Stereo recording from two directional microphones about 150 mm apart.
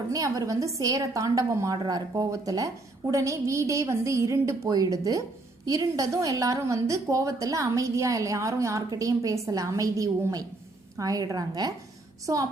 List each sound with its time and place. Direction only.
0.1 s a woman's voice: 25° right (ahead or behind)